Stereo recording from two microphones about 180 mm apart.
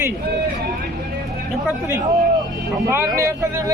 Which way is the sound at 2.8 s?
15° right (ahead or behind).